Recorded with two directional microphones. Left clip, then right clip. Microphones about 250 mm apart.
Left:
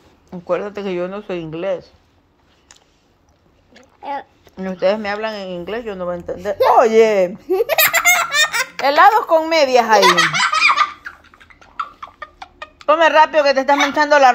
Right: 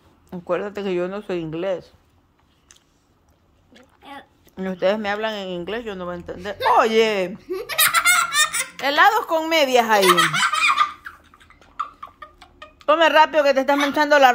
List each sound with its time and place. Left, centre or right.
0.3 s a woman's voice: centre
4.0 s a woman's voice: centre
7.4 s baby laughter: centre
9.3 s a woman's voice: centre
9.9 s laughter: centre
12.8 s a woman's voice: centre